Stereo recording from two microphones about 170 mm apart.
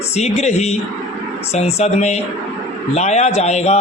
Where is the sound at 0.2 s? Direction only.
40° left (ahead or behind).